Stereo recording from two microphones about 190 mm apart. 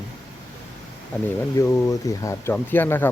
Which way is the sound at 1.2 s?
15° left (ahead or behind).